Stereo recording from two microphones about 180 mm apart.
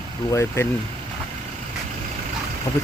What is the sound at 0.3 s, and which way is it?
Speech, 15° left (ahead or behind).